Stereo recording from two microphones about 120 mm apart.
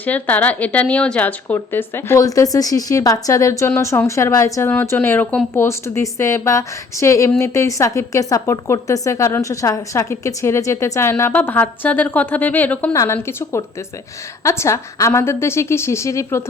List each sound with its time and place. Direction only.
0.0 s a woman's voice: 15° left (ahead or behind)
12.9 s a woman's voice: 25° left (ahead or behind)